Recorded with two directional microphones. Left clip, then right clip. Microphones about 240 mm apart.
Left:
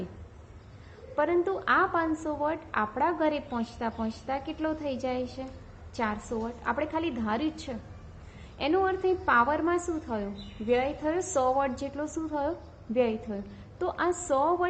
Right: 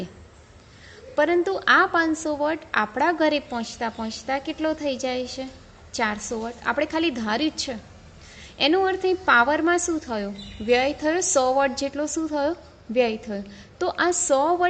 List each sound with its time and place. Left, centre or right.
1.1 s a woman's voice: right
8.5 s a woman's voice: right